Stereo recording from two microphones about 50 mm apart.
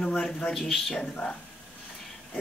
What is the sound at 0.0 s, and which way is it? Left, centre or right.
Speech, centre.